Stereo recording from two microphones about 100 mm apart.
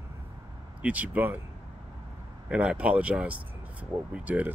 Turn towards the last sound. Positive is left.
turn(degrees=-15)  # may be behind; listen again after turning